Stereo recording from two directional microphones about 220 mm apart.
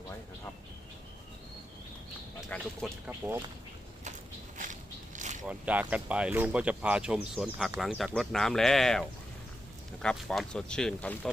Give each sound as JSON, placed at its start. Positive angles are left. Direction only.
{"t": 2.5, "sound": "speech", "side_deg": -5}
{"t": 4.5, "sound": "a sound", "side_deg": -35}
{"t": 5.5, "sound": "speech", "side_deg": -5}